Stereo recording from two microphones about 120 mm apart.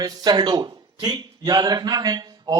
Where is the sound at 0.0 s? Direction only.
35° right (ahead or behind).